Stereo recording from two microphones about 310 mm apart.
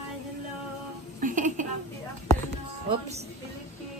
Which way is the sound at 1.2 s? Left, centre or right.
Right.